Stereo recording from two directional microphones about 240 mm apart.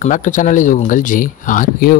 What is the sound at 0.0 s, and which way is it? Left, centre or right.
A man's voice, left.